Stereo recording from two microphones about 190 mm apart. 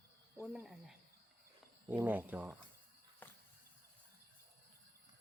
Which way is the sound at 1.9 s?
10° right (ahead or behind).